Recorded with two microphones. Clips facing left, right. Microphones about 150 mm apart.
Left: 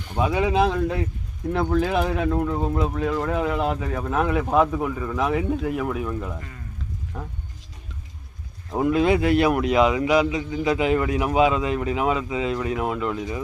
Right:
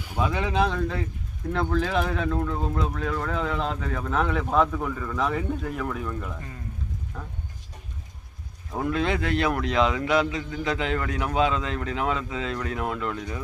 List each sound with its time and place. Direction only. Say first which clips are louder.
0.2 s a man's voice: left 4 dB; 15° left (ahead or behind)
8.8 s a man's voice: left 6 dB; 10° left (ahead or behind)